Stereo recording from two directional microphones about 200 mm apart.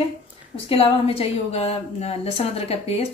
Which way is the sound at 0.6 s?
30° left (ahead or behind).